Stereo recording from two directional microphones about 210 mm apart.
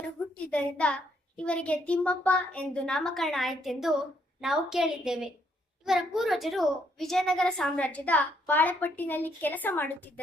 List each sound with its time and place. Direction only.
0.5 s a child's voice: 5° left (ahead or behind)